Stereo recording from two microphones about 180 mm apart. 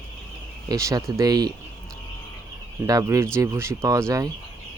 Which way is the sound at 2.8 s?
20° right (ahead or behind).